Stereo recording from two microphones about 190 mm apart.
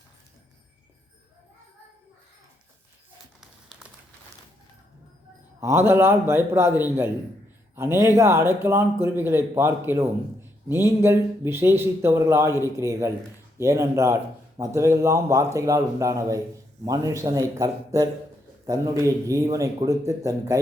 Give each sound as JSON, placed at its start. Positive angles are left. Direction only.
{"t": 5.5, "sound": "a man's voice", "side_deg": -15}